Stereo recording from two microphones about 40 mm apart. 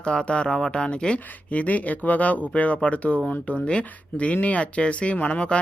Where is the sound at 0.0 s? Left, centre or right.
Left.